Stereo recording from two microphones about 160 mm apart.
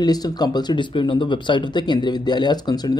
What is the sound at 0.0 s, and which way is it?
Speech, 25° left (ahead or behind).